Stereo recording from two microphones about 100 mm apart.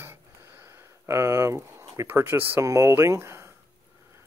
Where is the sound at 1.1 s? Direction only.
25° right (ahead or behind).